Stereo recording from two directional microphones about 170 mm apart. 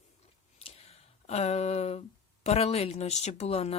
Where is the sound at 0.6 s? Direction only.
35° left (ahead or behind).